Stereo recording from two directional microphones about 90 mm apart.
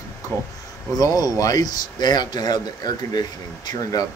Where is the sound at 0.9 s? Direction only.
45° left (ahead or behind).